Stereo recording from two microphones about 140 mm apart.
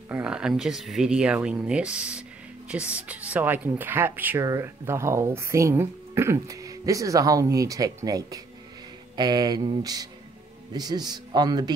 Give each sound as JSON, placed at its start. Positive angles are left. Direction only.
{"t": 0.1, "sound": "speech", "side_deg": -5}